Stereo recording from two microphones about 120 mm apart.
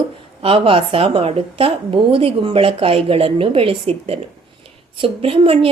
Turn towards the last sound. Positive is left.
turn(degrees=-50)  # may be behind; listen again after turning